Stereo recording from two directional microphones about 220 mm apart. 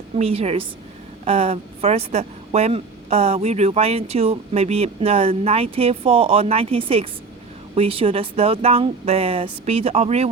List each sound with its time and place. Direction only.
0.2 s speech: 25° right (ahead or behind)